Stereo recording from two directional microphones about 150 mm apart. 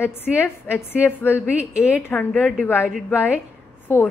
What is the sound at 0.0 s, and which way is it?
Speech, 15° left (ahead or behind).